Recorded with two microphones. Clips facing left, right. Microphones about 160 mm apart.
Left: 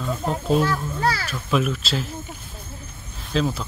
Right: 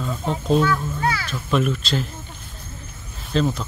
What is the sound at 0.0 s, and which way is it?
Speech, centre (ahead or behind).